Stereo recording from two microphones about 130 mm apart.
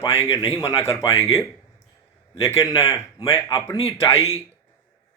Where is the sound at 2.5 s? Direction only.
25° left (ahead or behind).